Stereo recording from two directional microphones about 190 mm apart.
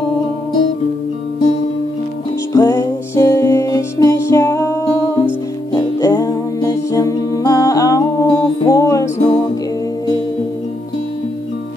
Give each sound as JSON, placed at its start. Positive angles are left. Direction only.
{"t": 2.5, "sound": "music", "side_deg": 15}